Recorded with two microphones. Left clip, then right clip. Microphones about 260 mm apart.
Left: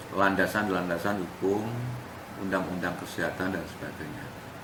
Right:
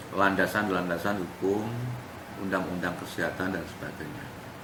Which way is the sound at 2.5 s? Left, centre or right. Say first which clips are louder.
Even; centre.